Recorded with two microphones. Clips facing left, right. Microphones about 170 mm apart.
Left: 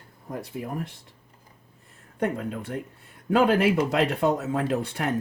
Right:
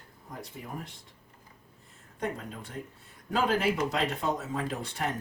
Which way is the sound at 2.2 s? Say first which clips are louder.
Left 7 dB; 60° left (ahead or behind).